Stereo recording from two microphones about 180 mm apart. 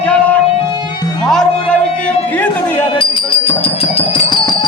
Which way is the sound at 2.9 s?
30° left (ahead or behind).